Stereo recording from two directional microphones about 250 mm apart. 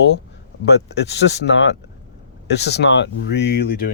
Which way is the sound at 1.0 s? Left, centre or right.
Left.